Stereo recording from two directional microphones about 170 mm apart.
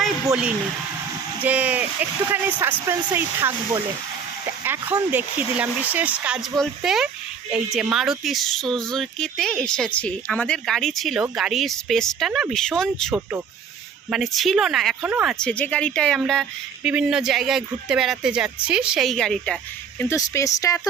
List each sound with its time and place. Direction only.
1.4 s speech: 10° right (ahead or behind)
4.6 s speech: 10° right (ahead or behind)
20.0 s speech: 15° left (ahead or behind)